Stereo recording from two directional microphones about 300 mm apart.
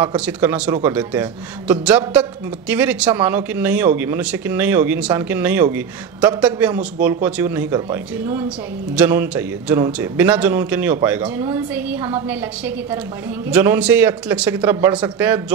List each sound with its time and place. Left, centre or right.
0.0 s speech: centre